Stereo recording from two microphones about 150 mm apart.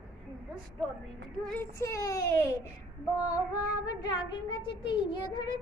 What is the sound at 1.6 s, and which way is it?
Speech, 20° left (ahead or behind).